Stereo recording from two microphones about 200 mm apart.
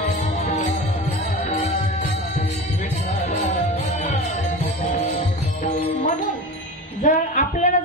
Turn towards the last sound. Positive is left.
turn(degrees=35)  # may be behind; listen again after turning